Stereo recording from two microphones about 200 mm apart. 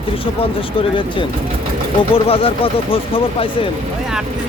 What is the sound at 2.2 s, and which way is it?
Speech, 30° left (ahead or behind).